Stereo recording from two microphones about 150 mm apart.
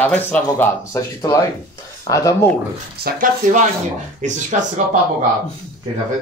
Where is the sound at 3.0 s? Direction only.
65° right (ahead or behind).